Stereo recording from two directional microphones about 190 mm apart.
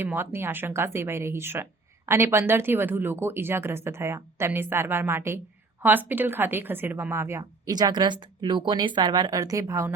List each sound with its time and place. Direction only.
0.0 s speech: 10° right (ahead or behind)